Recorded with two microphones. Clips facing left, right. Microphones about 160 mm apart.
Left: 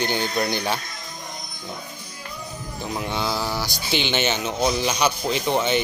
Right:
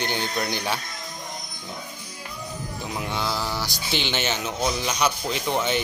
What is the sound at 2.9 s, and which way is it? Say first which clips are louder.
Speech: left 3 dB; centre (ahead or behind).